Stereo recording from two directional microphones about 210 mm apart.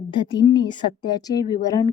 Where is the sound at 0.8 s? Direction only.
20° left (ahead or behind).